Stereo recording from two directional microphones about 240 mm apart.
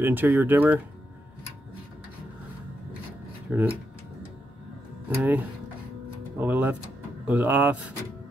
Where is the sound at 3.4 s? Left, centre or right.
Centre.